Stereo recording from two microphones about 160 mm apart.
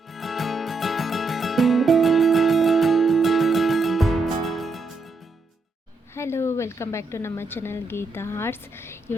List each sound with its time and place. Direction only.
0.1 s music: centre (ahead or behind)
6.1 s a woman's voice: 15° left (ahead or behind)